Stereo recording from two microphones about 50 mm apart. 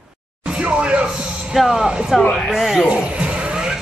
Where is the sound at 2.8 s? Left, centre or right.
Right.